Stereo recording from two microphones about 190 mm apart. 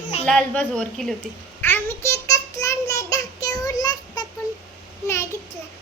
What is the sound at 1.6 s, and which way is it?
Child singing, 10° left (ahead or behind).